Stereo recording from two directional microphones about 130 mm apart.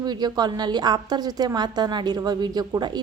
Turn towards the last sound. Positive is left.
turn(degrees=-35)  # may be behind; listen again after turning